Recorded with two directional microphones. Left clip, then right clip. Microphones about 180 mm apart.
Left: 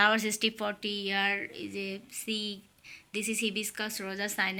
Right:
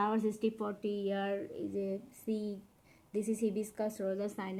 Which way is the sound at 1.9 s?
5° left (ahead or behind).